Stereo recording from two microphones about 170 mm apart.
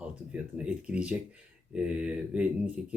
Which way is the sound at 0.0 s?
5° right (ahead or behind).